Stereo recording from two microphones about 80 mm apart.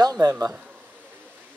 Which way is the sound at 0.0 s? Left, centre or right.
Right.